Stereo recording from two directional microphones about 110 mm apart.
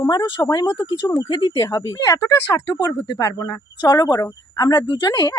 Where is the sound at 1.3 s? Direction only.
45° left (ahead or behind).